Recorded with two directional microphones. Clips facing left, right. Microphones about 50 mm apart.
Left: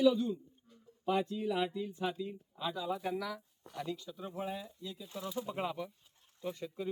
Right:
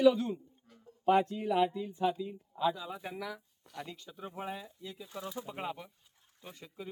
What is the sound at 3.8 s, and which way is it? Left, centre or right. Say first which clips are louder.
Speech: left 3 dB; right.